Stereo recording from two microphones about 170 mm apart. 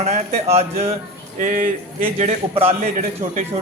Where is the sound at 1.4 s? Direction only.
50° right (ahead or behind).